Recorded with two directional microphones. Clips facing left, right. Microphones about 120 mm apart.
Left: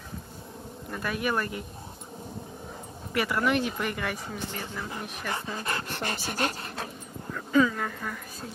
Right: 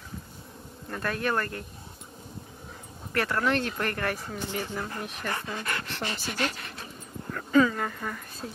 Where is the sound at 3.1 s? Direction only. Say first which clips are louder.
Left 1 dB; 10° left (ahead or behind).